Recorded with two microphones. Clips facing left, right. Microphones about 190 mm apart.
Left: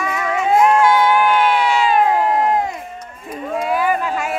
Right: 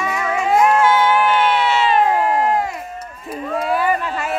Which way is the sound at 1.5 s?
Centre (ahead or behind).